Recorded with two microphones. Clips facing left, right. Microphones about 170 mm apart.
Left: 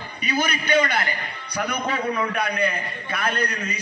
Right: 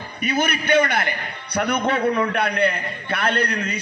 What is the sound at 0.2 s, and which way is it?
A man's voice, 60° right (ahead or behind).